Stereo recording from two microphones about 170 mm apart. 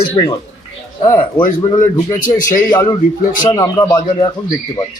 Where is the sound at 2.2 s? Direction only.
50° left (ahead or behind).